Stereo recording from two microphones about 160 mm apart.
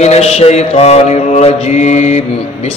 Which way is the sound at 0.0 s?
45° left (ahead or behind).